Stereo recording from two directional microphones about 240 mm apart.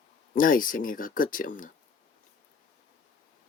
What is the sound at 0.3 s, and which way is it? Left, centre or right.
Speech, left.